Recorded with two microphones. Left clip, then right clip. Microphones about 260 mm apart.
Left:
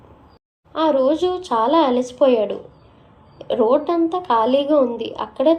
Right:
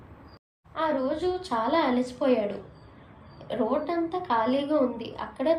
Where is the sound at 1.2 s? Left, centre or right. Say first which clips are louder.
Left 9 dB; centre.